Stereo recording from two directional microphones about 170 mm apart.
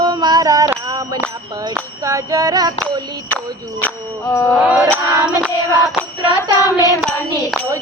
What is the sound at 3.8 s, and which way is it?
Music, 15° left (ahead or behind).